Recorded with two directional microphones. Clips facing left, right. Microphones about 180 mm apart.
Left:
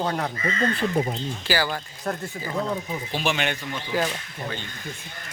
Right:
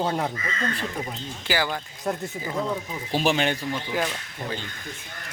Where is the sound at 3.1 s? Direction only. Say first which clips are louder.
Right 4 dB; 40° right (ahead or behind).